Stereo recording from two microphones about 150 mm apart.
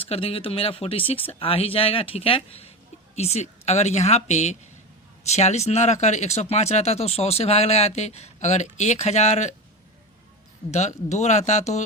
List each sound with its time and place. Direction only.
0.0 s speech: 40° left (ahead or behind)
10.7 s speech: 50° left (ahead or behind)